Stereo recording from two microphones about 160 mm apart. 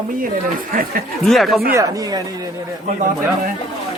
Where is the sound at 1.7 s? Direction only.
20° right (ahead or behind).